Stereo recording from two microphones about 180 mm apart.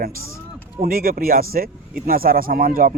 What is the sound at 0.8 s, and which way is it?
Speech, 55° right (ahead or behind).